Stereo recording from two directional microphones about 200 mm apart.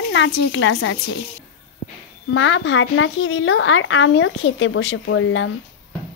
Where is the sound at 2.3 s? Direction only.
75° left (ahead or behind).